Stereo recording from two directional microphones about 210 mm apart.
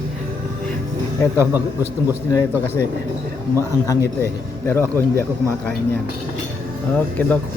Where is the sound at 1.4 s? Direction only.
10° right (ahead or behind).